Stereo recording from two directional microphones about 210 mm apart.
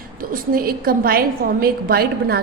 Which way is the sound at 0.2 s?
45° right (ahead or behind).